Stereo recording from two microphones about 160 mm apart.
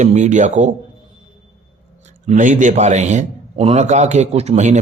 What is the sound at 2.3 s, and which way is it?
Speech, 50° right (ahead or behind).